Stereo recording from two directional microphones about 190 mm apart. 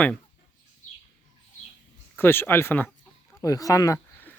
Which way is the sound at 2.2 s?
10° left (ahead or behind).